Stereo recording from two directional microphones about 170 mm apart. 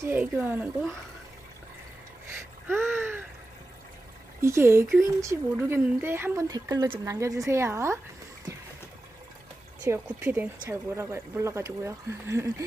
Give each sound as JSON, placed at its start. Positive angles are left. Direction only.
{"t": 0.0, "sound": "speech", "side_deg": -10}
{"t": 2.6, "sound": "a sound", "side_deg": -15}
{"t": 4.4, "sound": "speech", "side_deg": -15}
{"t": 9.8, "sound": "speech", "side_deg": -10}